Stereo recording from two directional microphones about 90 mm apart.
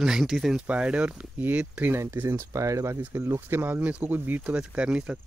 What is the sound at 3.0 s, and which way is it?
Speech, 20° right (ahead or behind).